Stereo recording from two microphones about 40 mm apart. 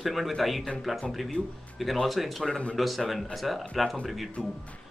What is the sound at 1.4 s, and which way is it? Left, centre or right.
Speech, left.